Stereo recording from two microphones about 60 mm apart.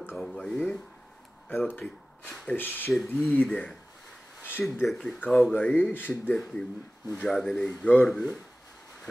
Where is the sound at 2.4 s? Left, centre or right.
Left.